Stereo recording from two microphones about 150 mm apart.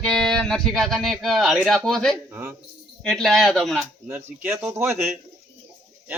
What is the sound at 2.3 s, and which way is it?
Speech, 20° right (ahead or behind).